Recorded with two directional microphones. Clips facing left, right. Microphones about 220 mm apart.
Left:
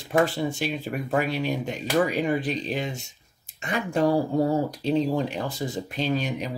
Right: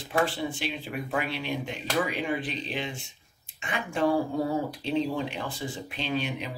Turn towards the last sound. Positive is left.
turn(degrees=40)  # may be behind; listen again after turning